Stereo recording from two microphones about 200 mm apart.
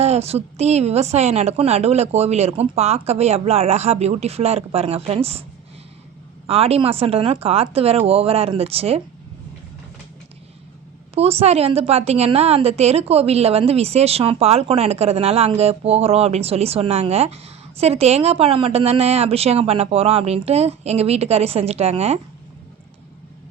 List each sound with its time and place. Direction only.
0.0 s a woman's voice: 30° right (ahead or behind)
6.5 s speech: 30° right (ahead or behind)
11.1 s a woman's voice: 30° right (ahead or behind)